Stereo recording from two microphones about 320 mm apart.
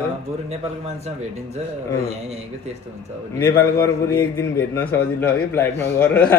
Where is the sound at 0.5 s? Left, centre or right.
Centre.